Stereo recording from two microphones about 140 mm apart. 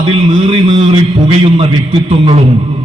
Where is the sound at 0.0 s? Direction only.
45° right (ahead or behind).